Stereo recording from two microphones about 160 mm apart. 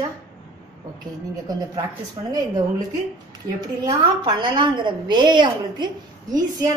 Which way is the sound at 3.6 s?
25° right (ahead or behind).